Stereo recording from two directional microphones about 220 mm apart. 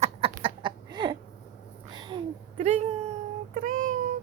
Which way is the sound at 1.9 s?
20° right (ahead or behind).